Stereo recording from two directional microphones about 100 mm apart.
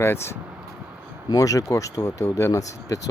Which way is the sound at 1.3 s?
35° left (ahead or behind).